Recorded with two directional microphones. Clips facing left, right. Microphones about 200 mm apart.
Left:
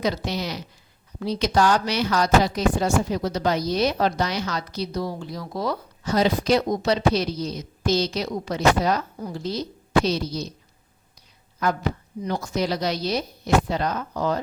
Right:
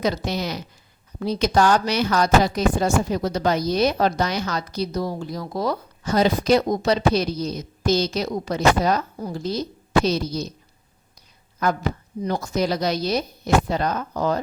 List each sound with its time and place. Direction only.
0.0 s a woman's voice: 50° right (ahead or behind)
12.2 s speech: 45° right (ahead or behind)